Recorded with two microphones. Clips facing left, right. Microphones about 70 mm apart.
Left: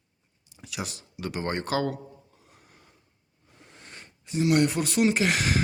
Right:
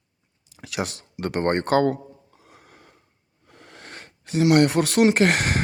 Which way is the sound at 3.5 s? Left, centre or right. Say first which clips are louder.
Right 6 dB; right.